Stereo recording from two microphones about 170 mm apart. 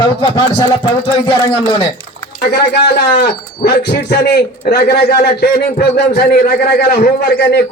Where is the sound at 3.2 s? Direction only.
75° left (ahead or behind).